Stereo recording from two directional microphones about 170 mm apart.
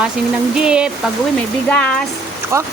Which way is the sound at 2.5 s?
15° right (ahead or behind).